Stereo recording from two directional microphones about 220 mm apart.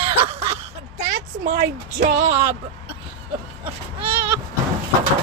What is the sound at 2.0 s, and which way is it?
Speech, 35° right (ahead or behind).